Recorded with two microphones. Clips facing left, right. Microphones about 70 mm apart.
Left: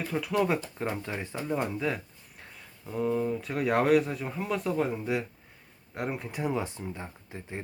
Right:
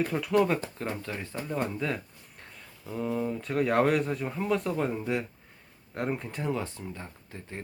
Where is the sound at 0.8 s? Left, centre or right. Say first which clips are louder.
Left 2 dB; centre.